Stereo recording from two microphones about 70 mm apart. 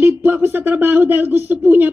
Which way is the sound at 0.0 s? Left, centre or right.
Right.